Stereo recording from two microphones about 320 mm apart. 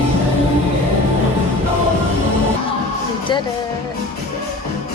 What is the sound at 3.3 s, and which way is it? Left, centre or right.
Speech, centre.